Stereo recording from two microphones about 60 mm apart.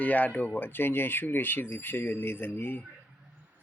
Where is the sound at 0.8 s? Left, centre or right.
Left.